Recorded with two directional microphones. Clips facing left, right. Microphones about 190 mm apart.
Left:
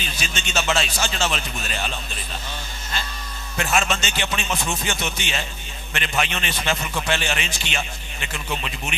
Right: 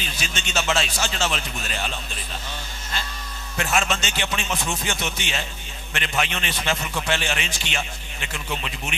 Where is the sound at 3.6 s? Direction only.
20° left (ahead or behind).